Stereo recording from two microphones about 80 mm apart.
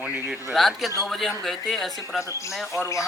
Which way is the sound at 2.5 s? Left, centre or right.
Centre.